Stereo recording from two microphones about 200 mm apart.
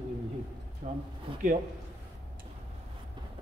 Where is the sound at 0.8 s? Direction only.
35° right (ahead or behind).